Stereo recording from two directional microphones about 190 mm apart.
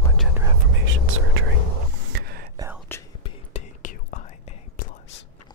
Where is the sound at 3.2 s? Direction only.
40° left (ahead or behind).